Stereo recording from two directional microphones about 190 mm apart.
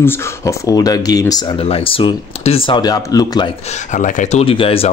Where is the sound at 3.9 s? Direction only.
40° left (ahead or behind).